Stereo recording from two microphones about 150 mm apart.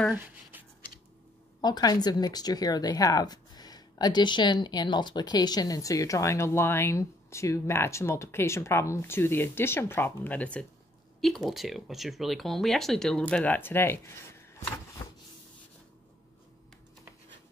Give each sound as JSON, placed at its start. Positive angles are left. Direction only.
{"t": 0.1, "sound": "speech", "side_deg": -10}
{"t": 1.6, "sound": "speech", "side_deg": 25}
{"t": 15.0, "sound": "a sound", "side_deg": 20}